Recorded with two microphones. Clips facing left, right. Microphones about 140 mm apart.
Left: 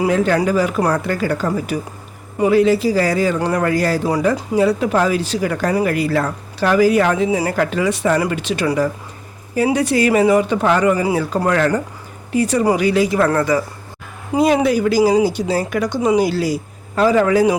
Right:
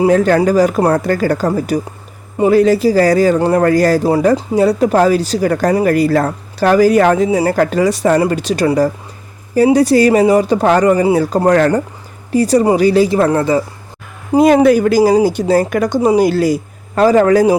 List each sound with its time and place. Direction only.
0.1 s speech: 45° right (ahead or behind)
7.3 s speech: 30° right (ahead or behind)
7.5 s speech: 40° right (ahead or behind)
14.3 s speech: 50° right (ahead or behind)
16.0 s speech: 35° right (ahead or behind)
16.2 s a man's voice: 50° right (ahead or behind)